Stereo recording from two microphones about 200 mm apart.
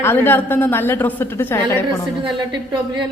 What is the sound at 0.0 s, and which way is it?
A woman's voice, 10° left (ahead or behind).